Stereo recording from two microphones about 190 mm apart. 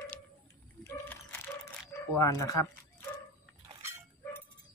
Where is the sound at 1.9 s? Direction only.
15° left (ahead or behind).